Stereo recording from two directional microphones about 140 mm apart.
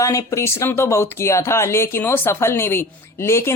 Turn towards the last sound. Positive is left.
turn(degrees=20)  # may be behind; listen again after turning